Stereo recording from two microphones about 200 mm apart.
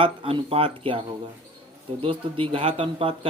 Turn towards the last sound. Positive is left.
turn(degrees=-25)  # may be behind; listen again after turning